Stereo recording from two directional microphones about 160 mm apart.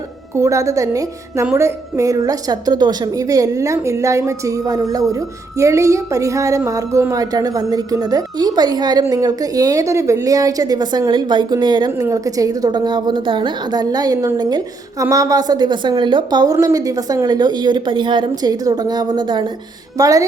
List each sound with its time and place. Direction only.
0.3 s a woman's voice: 20° right (ahead or behind)